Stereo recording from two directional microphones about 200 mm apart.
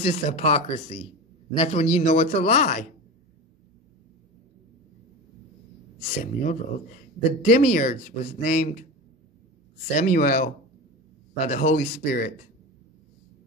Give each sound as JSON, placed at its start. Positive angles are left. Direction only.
{"t": 0.0, "sound": "speech", "side_deg": 30}
{"t": 6.2, "sound": "speech", "side_deg": 40}
{"t": 9.9, "sound": "speech", "side_deg": 40}